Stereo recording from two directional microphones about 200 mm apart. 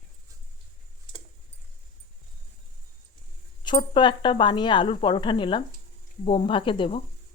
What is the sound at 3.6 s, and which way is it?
Speech, 25° left (ahead or behind).